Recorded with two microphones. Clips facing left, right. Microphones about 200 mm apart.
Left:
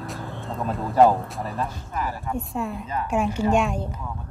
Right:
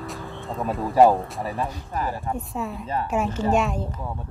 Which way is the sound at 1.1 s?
Centre (ahead or behind).